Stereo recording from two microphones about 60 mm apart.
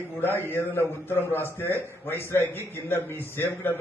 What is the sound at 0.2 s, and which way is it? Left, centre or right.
A man's voice, left.